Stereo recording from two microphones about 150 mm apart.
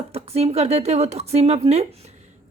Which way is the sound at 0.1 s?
40° right (ahead or behind).